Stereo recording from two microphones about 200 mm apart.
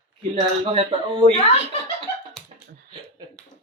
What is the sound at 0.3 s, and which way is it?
Speech, 30° right (ahead or behind).